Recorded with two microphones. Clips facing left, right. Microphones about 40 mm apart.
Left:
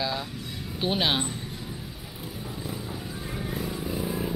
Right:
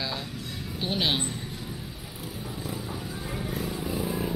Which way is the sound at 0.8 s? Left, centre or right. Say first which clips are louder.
Left 2 dB; centre.